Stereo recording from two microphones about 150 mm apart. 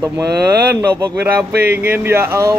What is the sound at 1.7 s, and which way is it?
Speech, 10° right (ahead or behind).